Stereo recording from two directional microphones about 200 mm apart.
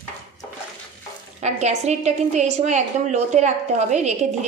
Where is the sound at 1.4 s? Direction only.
35° right (ahead or behind).